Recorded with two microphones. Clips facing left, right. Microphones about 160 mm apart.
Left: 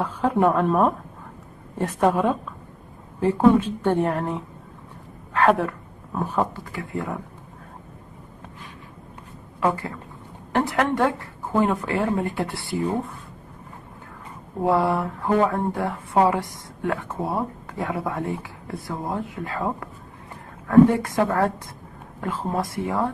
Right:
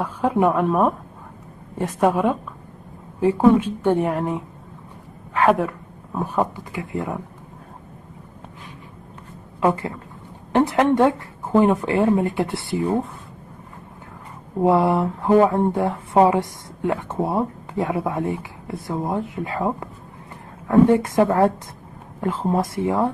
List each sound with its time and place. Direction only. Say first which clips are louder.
0.0 s a woman's voice: right 1 dB; 10° right (ahead or behind)
9.6 s a woman's voice: right 3 dB; 25° right (ahead or behind)
14.6 s speech: right 4 dB; 20° right (ahead or behind)